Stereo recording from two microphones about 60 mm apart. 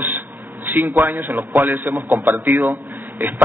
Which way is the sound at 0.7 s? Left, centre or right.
Right.